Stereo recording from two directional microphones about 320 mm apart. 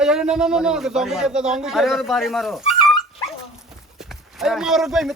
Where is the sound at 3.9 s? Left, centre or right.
Centre.